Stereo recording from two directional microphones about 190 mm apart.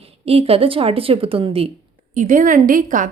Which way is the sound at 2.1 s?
45° right (ahead or behind).